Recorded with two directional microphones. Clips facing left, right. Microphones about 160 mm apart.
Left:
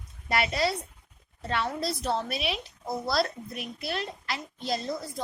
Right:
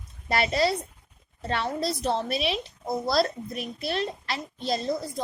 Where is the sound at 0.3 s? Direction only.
30° right (ahead or behind).